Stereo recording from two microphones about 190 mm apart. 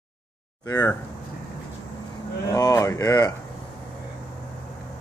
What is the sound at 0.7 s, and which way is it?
Speech, 20° left (ahead or behind).